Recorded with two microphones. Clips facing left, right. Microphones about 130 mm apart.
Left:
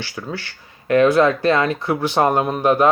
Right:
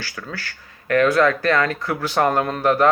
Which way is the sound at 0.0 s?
20° left (ahead or behind).